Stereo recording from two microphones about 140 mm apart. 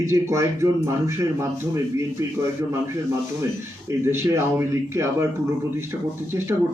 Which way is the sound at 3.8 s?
20° right (ahead or behind).